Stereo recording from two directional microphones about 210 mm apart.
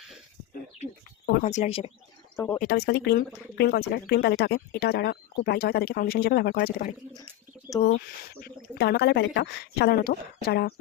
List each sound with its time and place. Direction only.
1.5 s speech: 35° left (ahead or behind)
2.3 s speech: 10° left (ahead or behind)
2.6 s speech: 50° left (ahead or behind)
8.4 s speech: 50° left (ahead or behind)